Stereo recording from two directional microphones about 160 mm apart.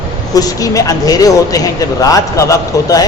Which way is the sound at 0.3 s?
20° left (ahead or behind).